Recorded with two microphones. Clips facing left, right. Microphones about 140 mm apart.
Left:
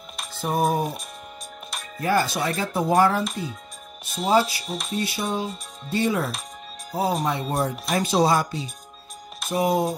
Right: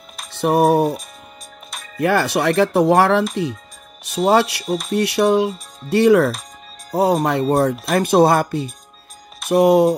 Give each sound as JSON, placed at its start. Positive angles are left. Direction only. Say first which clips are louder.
{"t": 0.3, "sound": "music", "louder": "right 8 dB", "side_deg": -70}
{"t": 2.0, "sound": "speech", "louder": "right 5 dB", "side_deg": -70}
{"t": 4.6, "sound": "speech", "louder": "right 9 dB", "side_deg": 0}
{"t": 4.9, "sound": "speech", "louder": "right 11 dB", "side_deg": -70}
{"t": 7.9, "sound": "speech", "louder": "right 6 dB", "side_deg": -55}
{"t": 9.5, "sound": "speech", "louder": "right 9 dB", "side_deg": -70}